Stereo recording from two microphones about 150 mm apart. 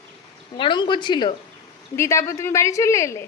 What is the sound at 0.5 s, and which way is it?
Speech, 35° left (ahead or behind).